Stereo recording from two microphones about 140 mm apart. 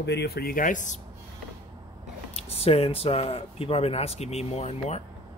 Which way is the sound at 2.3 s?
45° left (ahead or behind).